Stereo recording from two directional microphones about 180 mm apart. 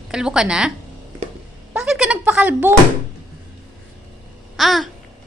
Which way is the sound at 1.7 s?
5° right (ahead or behind).